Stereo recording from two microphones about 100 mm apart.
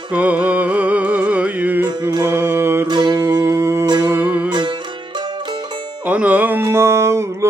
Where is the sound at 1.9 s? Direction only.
40° right (ahead or behind).